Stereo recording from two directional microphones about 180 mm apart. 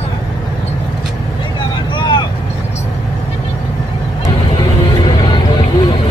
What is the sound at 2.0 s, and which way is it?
Vehicle, 25° left (ahead or behind).